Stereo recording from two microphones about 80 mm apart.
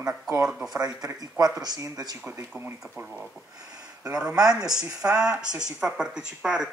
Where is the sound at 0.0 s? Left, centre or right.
Right.